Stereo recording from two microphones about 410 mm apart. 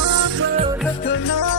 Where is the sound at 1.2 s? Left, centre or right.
Left.